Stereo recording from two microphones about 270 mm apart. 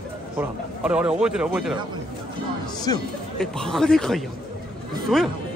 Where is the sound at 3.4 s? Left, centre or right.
Centre.